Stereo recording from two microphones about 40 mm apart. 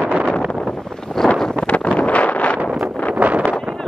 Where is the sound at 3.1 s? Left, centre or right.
Right.